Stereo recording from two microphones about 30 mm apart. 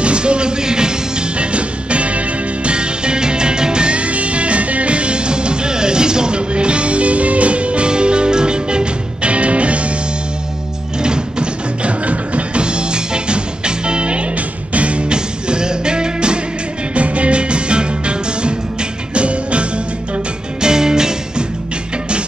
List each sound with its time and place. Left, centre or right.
0.0 s music: right
1.4 s music: right
11.0 s music: right
12.1 s music: right
12.6 s music: right
15.1 s music: right
16.9 s music: right
20.6 s music: right